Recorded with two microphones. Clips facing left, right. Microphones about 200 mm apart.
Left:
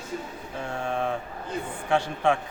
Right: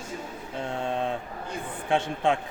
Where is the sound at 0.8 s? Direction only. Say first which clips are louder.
Left 1 dB; 20° right (ahead or behind).